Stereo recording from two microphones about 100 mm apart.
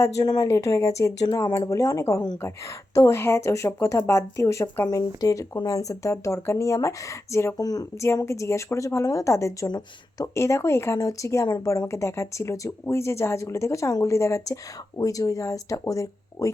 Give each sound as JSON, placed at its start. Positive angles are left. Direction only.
{"t": 0.4, "sound": "speech", "side_deg": 30}
{"t": 7.6, "sound": "speech", "side_deg": 40}
{"t": 8.0, "sound": "speech", "side_deg": 30}
{"t": 9.6, "sound": "speech", "side_deg": 45}
{"t": 10.3, "sound": "speech", "side_deg": 30}